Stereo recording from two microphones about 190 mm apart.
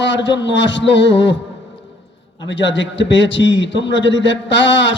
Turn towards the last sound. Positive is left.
turn(degrees=70)  # may be behind; listen again after turning